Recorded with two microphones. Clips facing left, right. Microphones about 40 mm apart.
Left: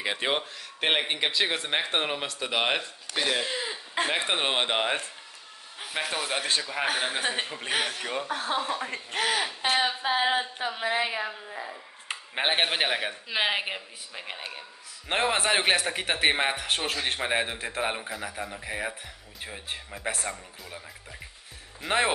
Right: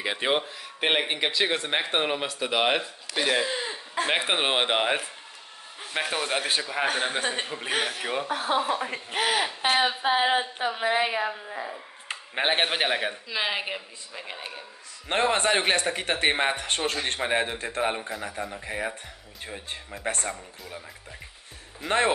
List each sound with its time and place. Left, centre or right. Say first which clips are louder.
0.0 s a man's voice: right 2 dB; centre
3.5 s a sound: right 1 dB; centre
4.2 s speech: right 2 dB; centre
6.9 s speech: right 1 dB; centre
12.1 s speech: right 2 dB; centre
13.3 s a woman's voice: left 4 dB; centre
21.8 s a man's voice: right 2 dB; centre